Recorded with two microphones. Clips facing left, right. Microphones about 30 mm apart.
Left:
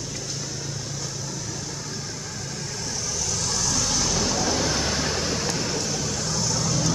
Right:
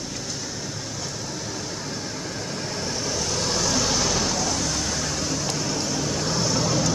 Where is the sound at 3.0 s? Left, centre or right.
Right; by 4.4 s centre.